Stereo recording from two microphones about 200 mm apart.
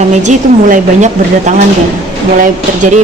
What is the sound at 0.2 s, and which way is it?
Speech, 35° right (ahead or behind).